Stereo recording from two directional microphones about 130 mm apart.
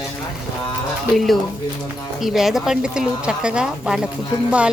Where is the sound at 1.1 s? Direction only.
Centre (ahead or behind).